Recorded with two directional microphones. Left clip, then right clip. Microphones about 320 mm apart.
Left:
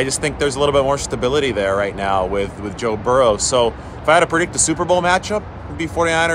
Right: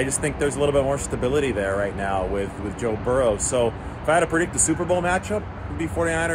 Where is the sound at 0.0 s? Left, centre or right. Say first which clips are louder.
Left 5 dB; left.